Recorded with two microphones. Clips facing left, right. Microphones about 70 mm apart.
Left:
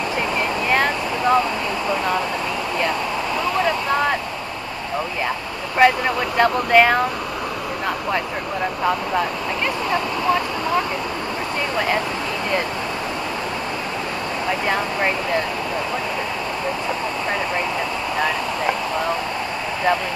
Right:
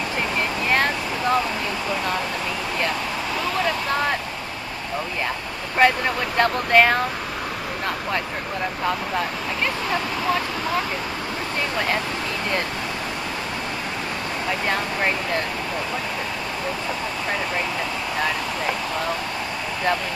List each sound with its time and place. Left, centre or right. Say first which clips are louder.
0.7 s vehicle: left 2 dB; centre
5.8 s speech: left 3 dB; centre